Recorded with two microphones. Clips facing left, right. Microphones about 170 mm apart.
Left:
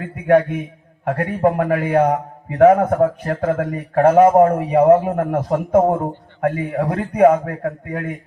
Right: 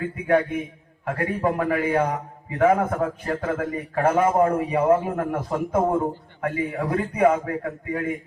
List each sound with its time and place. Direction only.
0.3 s a man's voice: 60° left (ahead or behind)